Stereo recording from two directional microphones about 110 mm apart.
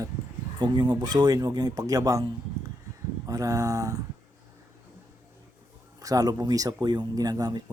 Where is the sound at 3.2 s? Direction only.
30° right (ahead or behind).